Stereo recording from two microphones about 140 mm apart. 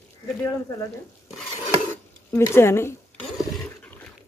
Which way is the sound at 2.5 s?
20° left (ahead or behind).